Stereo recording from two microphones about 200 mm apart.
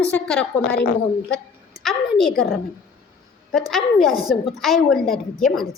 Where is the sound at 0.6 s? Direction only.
55° left (ahead or behind).